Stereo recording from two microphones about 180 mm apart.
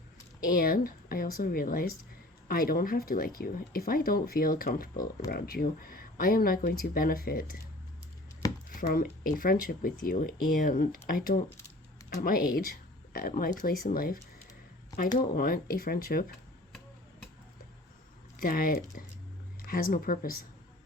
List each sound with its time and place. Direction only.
0.4 s speech: 55° left (ahead or behind)
8.4 s a sound: 20° left (ahead or behind)
8.9 s speech: 55° left (ahead or behind)
15.2 s speech: 50° left (ahead or behind)
18.3 s speech: 50° left (ahead or behind)